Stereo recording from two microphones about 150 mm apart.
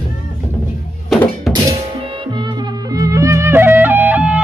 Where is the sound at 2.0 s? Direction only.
30° right (ahead or behind); by 4.4 s 10° right (ahead or behind).